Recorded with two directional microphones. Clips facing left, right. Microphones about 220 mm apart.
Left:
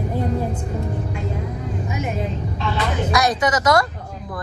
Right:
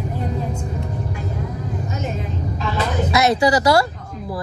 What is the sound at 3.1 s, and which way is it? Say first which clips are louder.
Speech: right 4 dB; 25° right (ahead or behind).